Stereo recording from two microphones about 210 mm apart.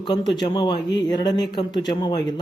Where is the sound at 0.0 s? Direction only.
20° left (ahead or behind).